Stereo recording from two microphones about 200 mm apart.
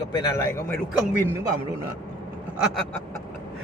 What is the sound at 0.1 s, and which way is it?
Speech, 20° left (ahead or behind).